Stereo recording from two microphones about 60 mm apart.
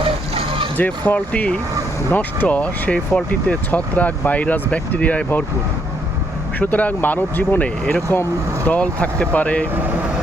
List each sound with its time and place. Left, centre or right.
0.8 s speech: left
6.6 s speech: left